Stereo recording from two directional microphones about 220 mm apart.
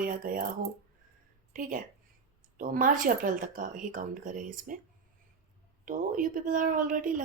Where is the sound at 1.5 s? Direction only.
40° right (ahead or behind).